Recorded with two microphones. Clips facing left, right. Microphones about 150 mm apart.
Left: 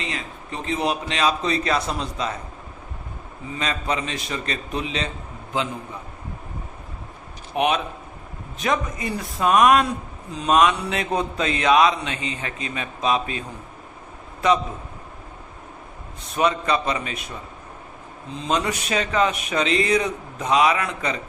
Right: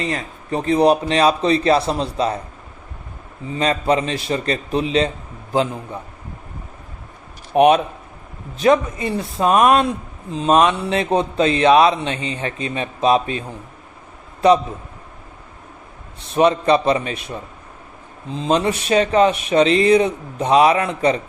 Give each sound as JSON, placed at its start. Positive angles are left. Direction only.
{"t": 0.0, "sound": "speech", "side_deg": -40}
{"t": 3.6, "sound": "speech", "side_deg": -35}
{"t": 7.5, "sound": "speech", "side_deg": -40}
{"t": 14.4, "sound": "speech", "side_deg": -30}
{"t": 16.3, "sound": "speech", "side_deg": -30}
{"t": 18.3, "sound": "speech", "side_deg": -30}